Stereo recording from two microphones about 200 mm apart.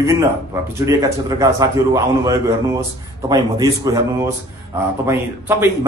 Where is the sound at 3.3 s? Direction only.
20° right (ahead or behind).